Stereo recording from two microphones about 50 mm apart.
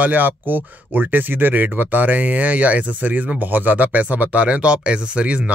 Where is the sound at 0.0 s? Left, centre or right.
Right.